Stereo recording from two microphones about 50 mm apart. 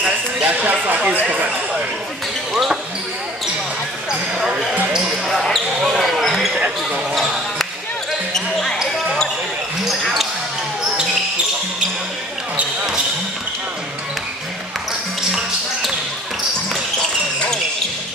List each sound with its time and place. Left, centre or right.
0.0 s a sound: right
4.4 s basketball bounce: centre
8.3 s basketball bounce: centre
9.8 s basketball bounce: centre